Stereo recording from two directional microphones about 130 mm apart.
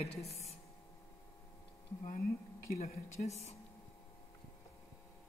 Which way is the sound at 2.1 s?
90° left.